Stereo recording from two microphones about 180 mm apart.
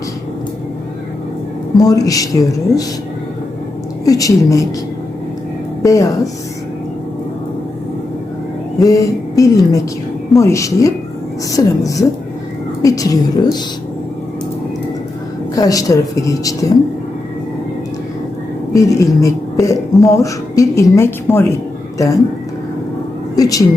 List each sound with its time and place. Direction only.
1.8 s a woman's voice: 20° left (ahead or behind)
4.0 s a woman's voice: 20° left (ahead or behind)
5.8 s speech: 20° left (ahead or behind)
8.8 s a woman's voice: 20° left (ahead or behind)
15.5 s a woman's voice: 20° left (ahead or behind)
18.7 s a woman's voice: 15° left (ahead or behind)
23.3 s a woman's voice: 20° left (ahead or behind)